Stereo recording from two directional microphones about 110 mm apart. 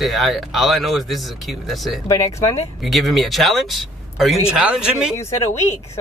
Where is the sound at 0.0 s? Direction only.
Centre (ahead or behind).